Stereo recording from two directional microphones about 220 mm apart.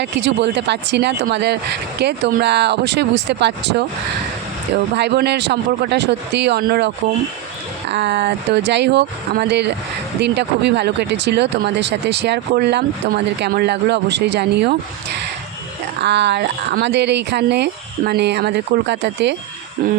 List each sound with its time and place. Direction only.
0.0 s speech: 50° right (ahead or behind)
4.9 s speech: 50° right (ahead or behind)
16.0 s speech: 50° right (ahead or behind)